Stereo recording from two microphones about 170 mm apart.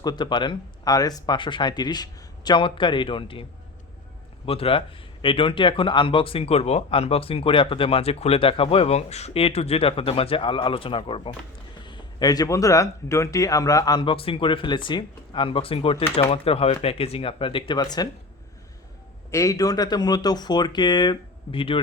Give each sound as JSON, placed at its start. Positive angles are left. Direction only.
{"t": 0.0, "sound": "speech", "side_deg": 25}
{"t": 4.4, "sound": "speech", "side_deg": 35}
{"t": 19.3, "sound": "speech", "side_deg": 20}